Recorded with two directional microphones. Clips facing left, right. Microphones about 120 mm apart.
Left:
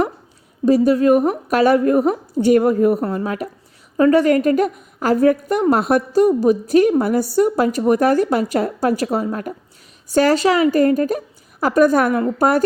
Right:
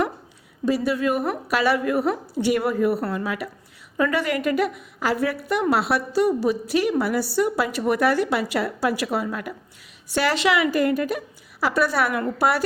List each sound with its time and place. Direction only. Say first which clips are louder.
0.6 s a woman's voice: left 8 dB; 40° left (ahead or behind)